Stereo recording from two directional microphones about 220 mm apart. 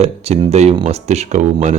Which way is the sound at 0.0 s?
30° right (ahead or behind).